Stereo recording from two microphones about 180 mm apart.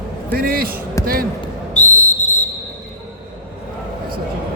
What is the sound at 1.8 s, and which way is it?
Whistle, 40° left (ahead or behind).